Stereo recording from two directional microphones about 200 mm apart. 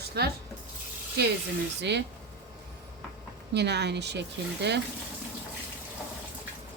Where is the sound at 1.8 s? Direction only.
60° right (ahead or behind).